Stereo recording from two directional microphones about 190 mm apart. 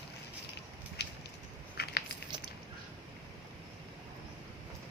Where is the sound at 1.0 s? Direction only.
65° left (ahead or behind).